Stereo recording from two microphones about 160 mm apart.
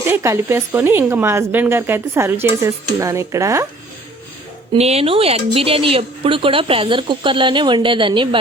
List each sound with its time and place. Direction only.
0.0 s speech: 15° right (ahead or behind)
4.7 s speech: 40° right (ahead or behind)